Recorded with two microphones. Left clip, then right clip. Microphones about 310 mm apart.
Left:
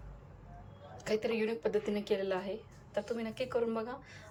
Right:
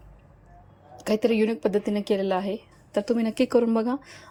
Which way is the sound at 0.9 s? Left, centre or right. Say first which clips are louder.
Right 10 dB; centre.